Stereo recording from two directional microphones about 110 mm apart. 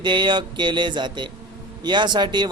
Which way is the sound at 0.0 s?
45° right (ahead or behind).